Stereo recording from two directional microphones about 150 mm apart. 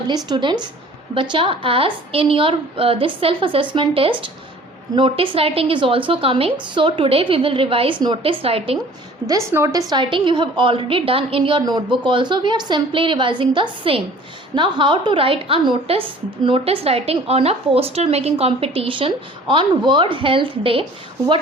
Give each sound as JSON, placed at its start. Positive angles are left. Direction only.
{"t": 0.3, "sound": "a woman's voice", "side_deg": -30}
{"t": 9.2, "sound": "a woman's voice", "side_deg": -20}
{"t": 9.9, "sound": "a woman's voice", "side_deg": -35}